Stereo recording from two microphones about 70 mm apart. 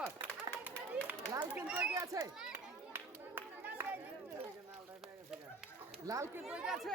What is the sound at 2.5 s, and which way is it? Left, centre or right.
Chatter, right.